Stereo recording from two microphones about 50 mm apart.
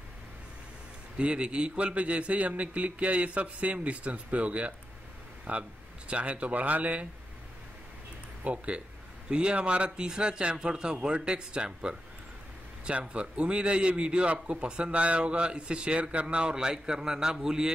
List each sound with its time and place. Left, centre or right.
1.1 s a man's voice: right
8.5 s a man's voice: right